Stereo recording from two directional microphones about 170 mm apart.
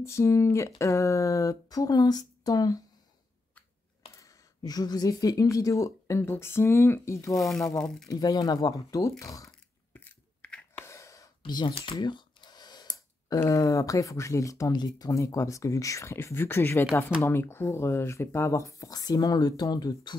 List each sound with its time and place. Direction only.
0.0 s speech: 15° left (ahead or behind)
4.2 s speech: 20° left (ahead or behind)
7.3 s speech: centre (ahead or behind)
8.1 s speech: 20° left (ahead or behind)
9.9 s a sound: 10° left (ahead or behind); by 12.8 s 25° left (ahead or behind)
13.3 s speech: 20° left (ahead or behind)